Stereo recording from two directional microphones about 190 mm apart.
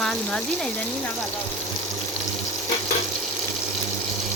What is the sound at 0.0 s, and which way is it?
Speech, 5° left (ahead or behind).